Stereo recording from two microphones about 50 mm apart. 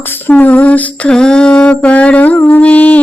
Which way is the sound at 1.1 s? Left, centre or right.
Centre.